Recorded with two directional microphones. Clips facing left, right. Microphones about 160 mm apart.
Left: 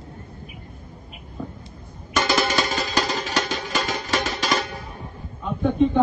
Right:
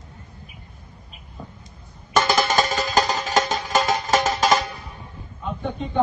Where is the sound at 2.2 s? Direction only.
45° right (ahead or behind).